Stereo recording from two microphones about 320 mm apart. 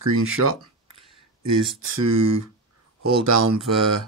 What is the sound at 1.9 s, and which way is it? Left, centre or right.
Speech, right.